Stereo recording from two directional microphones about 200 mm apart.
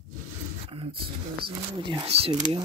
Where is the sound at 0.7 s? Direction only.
25° right (ahead or behind).